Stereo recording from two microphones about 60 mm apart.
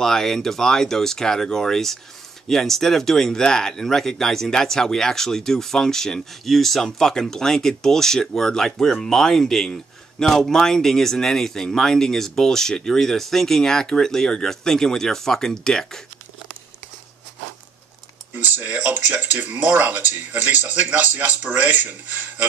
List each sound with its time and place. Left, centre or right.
0.0 s speech: centre
18.3 s speech: right